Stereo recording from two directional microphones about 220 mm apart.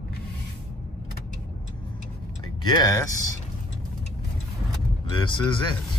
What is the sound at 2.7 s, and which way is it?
Speech, 15° left (ahead or behind).